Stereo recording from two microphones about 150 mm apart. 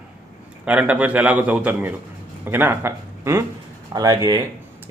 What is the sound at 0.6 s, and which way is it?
A man's voice, 10° right (ahead or behind).